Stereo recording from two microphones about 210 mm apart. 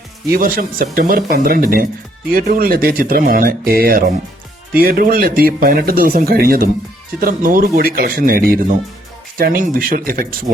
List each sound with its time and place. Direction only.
0.3 s speech: 45° right (ahead or behind)